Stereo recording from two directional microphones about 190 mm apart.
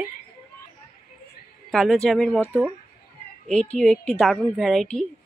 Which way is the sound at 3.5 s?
5° left (ahead or behind).